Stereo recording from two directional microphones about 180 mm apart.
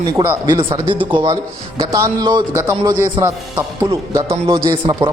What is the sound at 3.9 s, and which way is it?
Speech, 25° right (ahead or behind).